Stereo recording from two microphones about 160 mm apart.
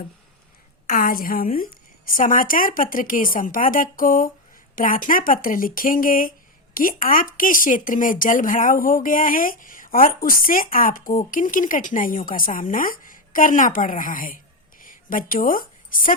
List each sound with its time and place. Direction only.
0.9 s speech: 65° left (ahead or behind)